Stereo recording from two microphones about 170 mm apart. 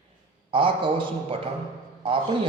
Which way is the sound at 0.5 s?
30° right (ahead or behind).